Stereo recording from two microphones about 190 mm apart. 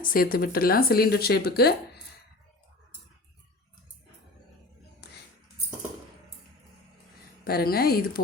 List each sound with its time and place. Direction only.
0.0 s speech: 50° left (ahead or behind)
5.0 s a sound: 60° left (ahead or behind)
7.4 s speech: 55° left (ahead or behind)